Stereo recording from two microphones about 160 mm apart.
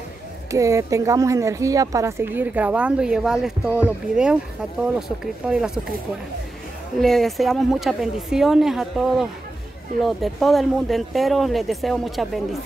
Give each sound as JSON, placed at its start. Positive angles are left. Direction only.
{"t": 0.5, "sound": "speech", "side_deg": -20}
{"t": 7.0, "sound": "speech", "side_deg": 0}